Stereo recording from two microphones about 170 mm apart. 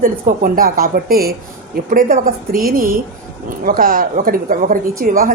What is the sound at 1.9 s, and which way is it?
Speech, 50° right (ahead or behind).